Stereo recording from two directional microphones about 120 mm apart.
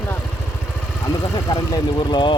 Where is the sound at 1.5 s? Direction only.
35° left (ahead or behind).